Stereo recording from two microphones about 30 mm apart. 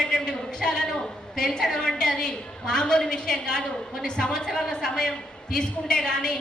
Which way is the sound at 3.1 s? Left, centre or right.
Left.